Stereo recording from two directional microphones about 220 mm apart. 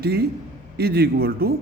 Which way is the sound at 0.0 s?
45° right (ahead or behind).